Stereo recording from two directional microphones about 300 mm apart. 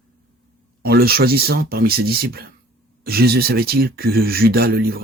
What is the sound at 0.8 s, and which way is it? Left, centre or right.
Speech, right.